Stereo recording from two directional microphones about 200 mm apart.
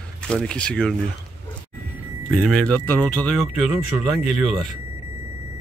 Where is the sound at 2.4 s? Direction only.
Centre (ahead or behind).